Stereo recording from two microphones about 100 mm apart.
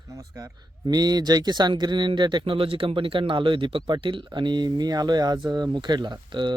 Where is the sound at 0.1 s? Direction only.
35° right (ahead or behind).